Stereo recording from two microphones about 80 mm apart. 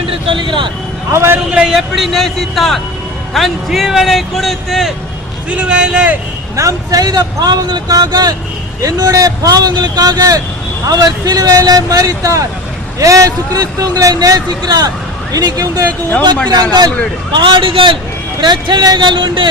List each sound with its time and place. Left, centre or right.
0.3 s a man's voice: right
1.1 s a man's voice: right
1.5 s speech: centre
5.5 s a man's voice: centre
6.6 s a man's voice: right
17.3 s a man's voice: right
18.3 s speech: right
19.0 s speech: right